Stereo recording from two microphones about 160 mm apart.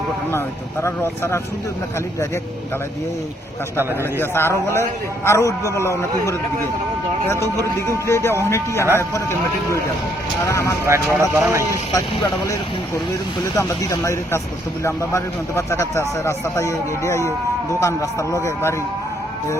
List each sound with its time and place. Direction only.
0.3 s a man's voice: 15° left (ahead or behind)
4.2 s a man's voice: 15° left (ahead or behind)
7.6 s a man's voice: 15° left (ahead or behind)
10.4 s speech: 20° left (ahead or behind)
10.8 s speech: 15° right (ahead or behind)
11.9 s speech: 20° left (ahead or behind)
13.6 s a man's voice: 20° left (ahead or behind)